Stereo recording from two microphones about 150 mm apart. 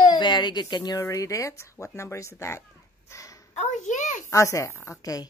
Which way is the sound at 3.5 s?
50° left (ahead or behind).